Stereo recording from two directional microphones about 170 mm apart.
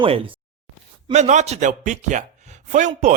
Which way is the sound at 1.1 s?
45° right (ahead or behind).